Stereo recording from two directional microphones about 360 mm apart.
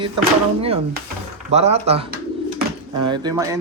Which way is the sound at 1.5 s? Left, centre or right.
Centre.